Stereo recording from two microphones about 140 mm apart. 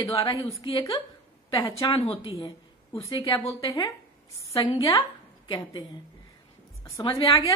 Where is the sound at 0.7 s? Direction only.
40° left (ahead or behind).